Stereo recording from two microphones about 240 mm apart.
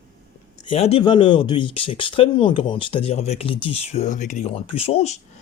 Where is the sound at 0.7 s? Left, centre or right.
Left.